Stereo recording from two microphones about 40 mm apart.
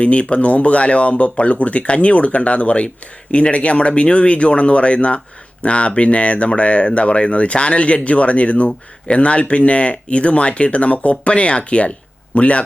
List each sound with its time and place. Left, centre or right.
0.0 s speech: left